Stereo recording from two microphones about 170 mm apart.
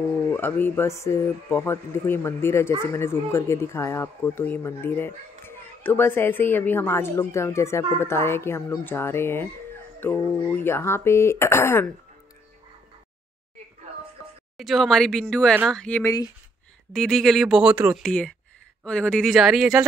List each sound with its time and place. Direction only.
0.3 s speech: 10° left (ahead or behind)
14.6 s speech: centre (ahead or behind)
16.0 s speech: 20° left (ahead or behind)
16.9 s speech: 5° left (ahead or behind)
18.0 s speech: 5° left (ahead or behind)